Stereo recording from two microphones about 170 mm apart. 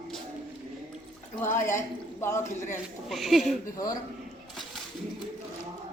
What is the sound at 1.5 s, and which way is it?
Speech, 15° left (ahead or behind).